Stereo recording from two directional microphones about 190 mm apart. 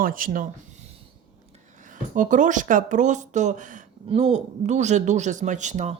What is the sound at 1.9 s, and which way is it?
Speech, 45° right (ahead or behind).